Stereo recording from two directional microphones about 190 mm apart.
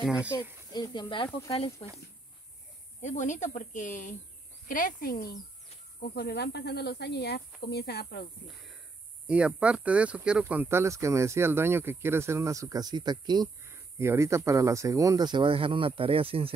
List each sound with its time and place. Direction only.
0.0 s speech: 5° right (ahead or behind)
0.4 s speech: 20° left (ahead or behind)
3.0 s speech: 40° left (ahead or behind); by 8.3 s 55° left (ahead or behind)
9.3 s speech: 5° right (ahead or behind); by 16.5 s 30° right (ahead or behind)